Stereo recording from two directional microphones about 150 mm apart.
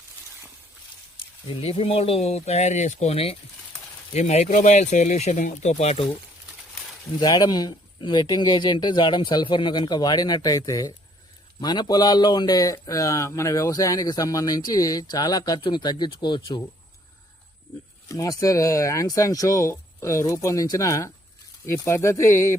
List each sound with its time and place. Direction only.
1.1 s speech: 35° left (ahead or behind)
7.2 s speech: 25° left (ahead or behind)
18.1 s speech: 25° left (ahead or behind)